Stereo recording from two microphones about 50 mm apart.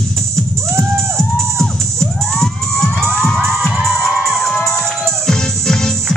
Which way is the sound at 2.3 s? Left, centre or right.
Centre.